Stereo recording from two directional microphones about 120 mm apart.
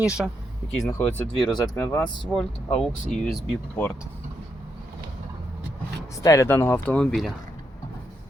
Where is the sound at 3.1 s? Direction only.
80° left.